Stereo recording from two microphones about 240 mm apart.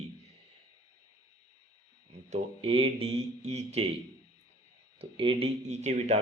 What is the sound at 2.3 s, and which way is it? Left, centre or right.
Speech, right.